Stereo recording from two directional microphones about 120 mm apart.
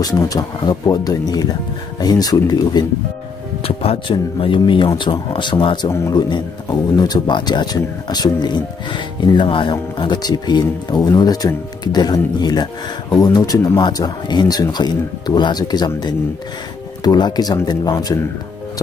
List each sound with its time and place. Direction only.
0.0 s speech: 30° left (ahead or behind)
3.6 s speech: 55° left (ahead or behind)
5.9 s a man's voice: 25° left (ahead or behind)
6.1 s speech: 35° left (ahead or behind)
17.0 s speech: 35° left (ahead or behind)